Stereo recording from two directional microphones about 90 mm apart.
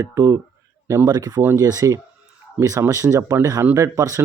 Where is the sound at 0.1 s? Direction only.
35° right (ahead or behind).